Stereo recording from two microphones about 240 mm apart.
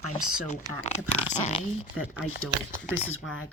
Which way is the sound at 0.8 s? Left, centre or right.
Left.